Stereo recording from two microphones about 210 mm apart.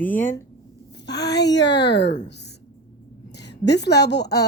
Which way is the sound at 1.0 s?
50° left (ahead or behind).